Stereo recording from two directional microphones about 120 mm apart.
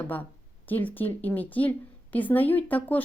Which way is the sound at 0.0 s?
15° left (ahead or behind).